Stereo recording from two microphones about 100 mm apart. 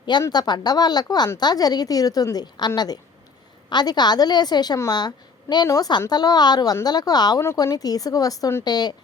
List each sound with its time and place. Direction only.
0.0 s a woman's voice: 45° left (ahead or behind)